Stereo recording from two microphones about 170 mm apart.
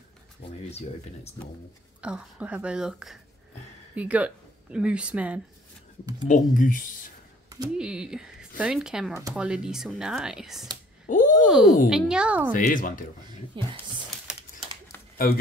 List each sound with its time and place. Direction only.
0.7 s speech: 40° left (ahead or behind)
2.0 s speech: 5° right (ahead or behind)
6.2 s speech: 50° left (ahead or behind)
7.7 s speech: 5° right (ahead or behind)
11.1 s a sound: 55° left (ahead or behind)
11.4 s speech: 5° right (ahead or behind)
12.5 s speech: 50° left (ahead or behind)
13.5 s speech: 30° right (ahead or behind)